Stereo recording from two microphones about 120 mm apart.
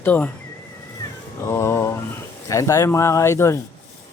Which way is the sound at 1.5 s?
25° left (ahead or behind).